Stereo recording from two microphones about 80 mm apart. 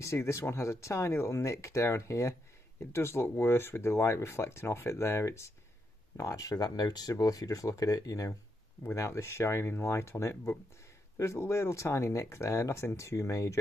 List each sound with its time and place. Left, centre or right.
0.0 s speech: left